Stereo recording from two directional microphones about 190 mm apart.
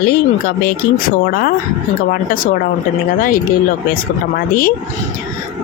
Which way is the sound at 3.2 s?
45° left (ahead or behind).